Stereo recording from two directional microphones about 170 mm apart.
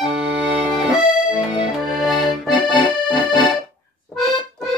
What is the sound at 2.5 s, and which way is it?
Accordion, 25° left (ahead or behind).